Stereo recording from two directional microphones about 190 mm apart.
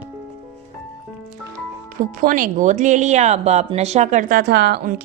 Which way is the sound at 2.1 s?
45° right (ahead or behind).